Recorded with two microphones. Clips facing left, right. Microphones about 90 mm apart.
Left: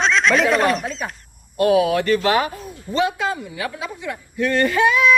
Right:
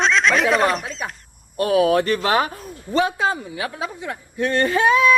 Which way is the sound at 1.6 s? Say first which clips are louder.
Left 1 dB; 40° right (ahead or behind).